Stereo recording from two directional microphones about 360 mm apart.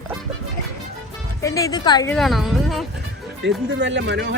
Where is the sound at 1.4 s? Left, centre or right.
Centre.